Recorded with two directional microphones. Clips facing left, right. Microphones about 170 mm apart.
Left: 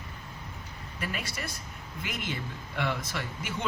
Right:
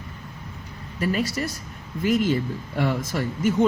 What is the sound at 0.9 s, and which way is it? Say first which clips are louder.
Speech: right 12 dB; 35° right (ahead or behind).